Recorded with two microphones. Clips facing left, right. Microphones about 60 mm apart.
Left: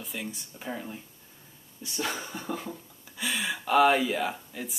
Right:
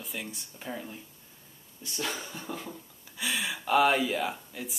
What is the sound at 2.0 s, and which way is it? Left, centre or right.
Speech, centre.